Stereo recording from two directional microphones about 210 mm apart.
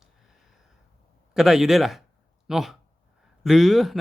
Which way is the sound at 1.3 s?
Centre (ahead or behind).